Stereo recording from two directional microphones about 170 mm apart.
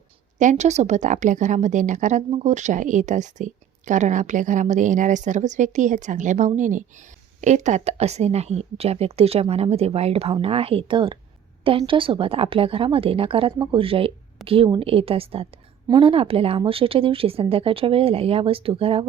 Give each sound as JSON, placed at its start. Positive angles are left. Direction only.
{"t": 0.3, "sound": "a woman's voice", "side_deg": -45}